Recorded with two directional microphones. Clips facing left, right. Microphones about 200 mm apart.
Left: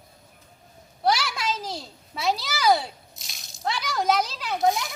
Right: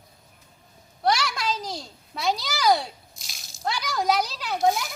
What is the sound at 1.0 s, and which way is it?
A child's voice, centre (ahead or behind).